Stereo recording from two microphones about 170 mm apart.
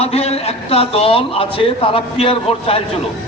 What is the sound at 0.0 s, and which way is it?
A man's voice, 35° left (ahead or behind).